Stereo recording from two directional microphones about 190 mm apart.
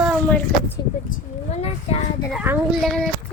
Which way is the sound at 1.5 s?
35° left (ahead or behind).